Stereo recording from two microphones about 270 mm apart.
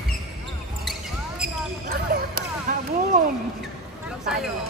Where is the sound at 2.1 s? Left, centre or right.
Right.